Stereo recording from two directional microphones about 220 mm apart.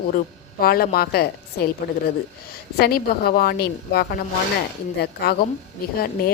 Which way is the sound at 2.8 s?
45° left (ahead or behind).